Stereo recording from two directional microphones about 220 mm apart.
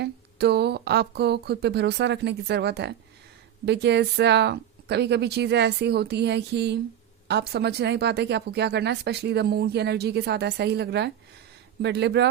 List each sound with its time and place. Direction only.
0.0 s speech: 50° right (ahead or behind)